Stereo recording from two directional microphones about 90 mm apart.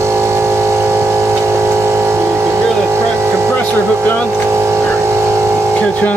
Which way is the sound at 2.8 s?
30° right (ahead or behind).